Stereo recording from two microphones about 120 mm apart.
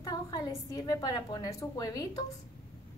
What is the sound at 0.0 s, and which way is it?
A woman's voice, 35° left (ahead or behind).